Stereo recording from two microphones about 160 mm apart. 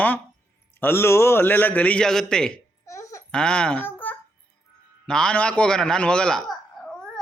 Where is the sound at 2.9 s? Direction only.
20° left (ahead or behind).